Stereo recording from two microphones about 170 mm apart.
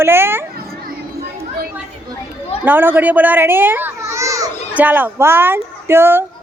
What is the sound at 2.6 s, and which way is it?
A child's voice, 10° right (ahead or behind).